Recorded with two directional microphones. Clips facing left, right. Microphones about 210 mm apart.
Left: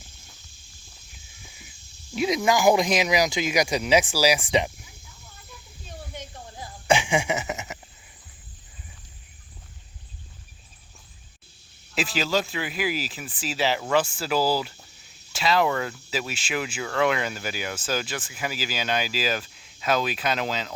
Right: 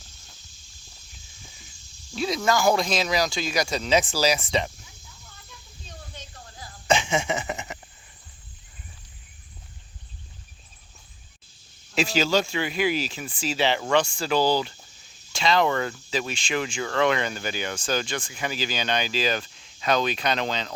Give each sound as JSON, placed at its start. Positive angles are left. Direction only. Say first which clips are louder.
{"t": 2.1, "sound": "speech", "louder": "left 2 dB", "side_deg": 15}
{"t": 6.1, "sound": "a sound", "louder": "left 5 dB", "side_deg": 15}
{"t": 11.9, "sound": "speech", "louder": "right 3 dB", "side_deg": 0}